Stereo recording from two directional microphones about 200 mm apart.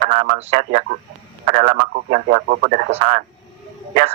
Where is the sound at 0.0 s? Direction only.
40° right (ahead or behind).